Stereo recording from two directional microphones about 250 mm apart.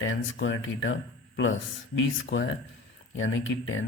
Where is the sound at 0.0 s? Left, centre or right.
Left.